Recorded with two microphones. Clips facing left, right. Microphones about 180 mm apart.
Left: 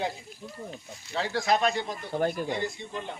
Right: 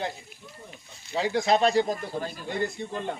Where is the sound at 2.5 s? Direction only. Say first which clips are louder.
Right 2 dB; 55° right (ahead or behind).